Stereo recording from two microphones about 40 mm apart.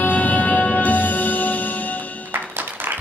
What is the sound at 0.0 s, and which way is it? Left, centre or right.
Music, left.